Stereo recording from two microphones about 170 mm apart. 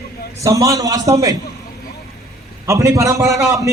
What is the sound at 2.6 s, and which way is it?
A man's voice, 20° right (ahead or behind).